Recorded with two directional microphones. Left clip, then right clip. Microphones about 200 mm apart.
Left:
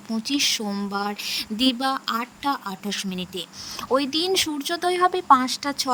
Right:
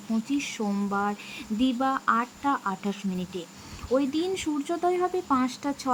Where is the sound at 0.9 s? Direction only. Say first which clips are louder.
Left 5 dB; 50° left (ahead or behind).